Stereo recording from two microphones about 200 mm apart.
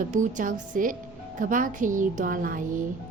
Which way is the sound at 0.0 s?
40° right (ahead or behind).